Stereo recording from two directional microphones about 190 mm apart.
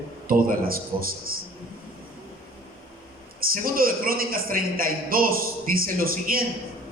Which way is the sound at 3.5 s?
50° right (ahead or behind).